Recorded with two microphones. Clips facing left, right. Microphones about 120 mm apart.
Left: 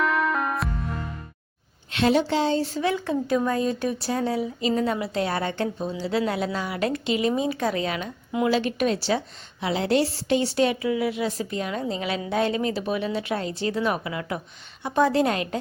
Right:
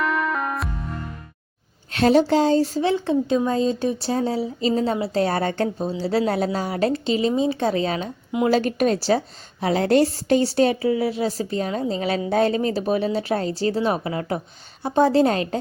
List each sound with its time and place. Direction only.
0.0 s music: centre (ahead or behind)
1.9 s a woman's voice: 40° right (ahead or behind)